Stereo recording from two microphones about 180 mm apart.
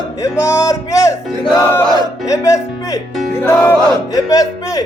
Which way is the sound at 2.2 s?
15° left (ahead or behind).